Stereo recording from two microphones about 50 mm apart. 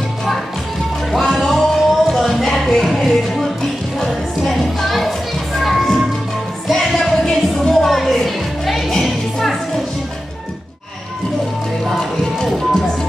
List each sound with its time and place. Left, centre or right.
1.1 s music: centre
11.8 s music: centre